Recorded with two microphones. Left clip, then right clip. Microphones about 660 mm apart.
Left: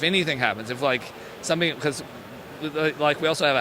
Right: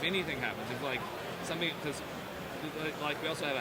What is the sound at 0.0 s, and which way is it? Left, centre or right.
Speech, left.